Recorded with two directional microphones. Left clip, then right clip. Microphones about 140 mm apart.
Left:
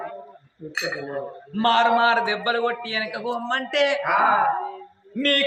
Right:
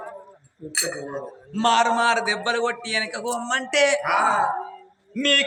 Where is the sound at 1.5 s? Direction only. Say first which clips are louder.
Left 1 dB; 20° right (ahead or behind).